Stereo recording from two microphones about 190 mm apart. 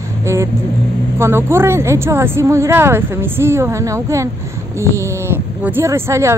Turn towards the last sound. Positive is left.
turn(degrees=-15)  # may be behind; listen again after turning